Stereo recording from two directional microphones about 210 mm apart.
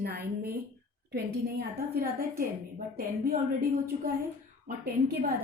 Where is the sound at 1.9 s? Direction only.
45° right (ahead or behind).